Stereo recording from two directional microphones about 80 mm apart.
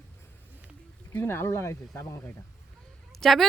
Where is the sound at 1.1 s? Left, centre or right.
Left.